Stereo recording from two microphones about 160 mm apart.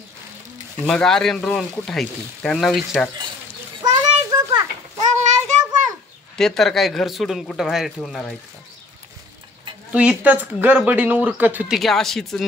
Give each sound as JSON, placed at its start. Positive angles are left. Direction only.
{"t": 0.8, "sound": "speech", "side_deg": 5}
{"t": 3.8, "sound": "children playing", "side_deg": -25}
{"t": 5.0, "sound": "child singing", "side_deg": -45}
{"t": 6.3, "sound": "speech", "side_deg": 5}
{"t": 9.9, "sound": "speech", "side_deg": -10}
{"t": 11.8, "sound": "speech", "side_deg": 0}